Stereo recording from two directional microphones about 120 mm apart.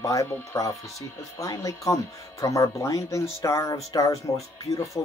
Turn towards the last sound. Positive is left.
turn(degrees=25)  # may be behind; listen again after turning